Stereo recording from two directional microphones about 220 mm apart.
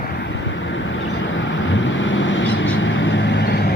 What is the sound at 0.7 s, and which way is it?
Vehicle, 60° left (ahead or behind).